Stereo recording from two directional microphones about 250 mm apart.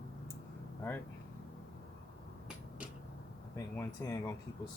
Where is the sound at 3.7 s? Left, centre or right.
Centre.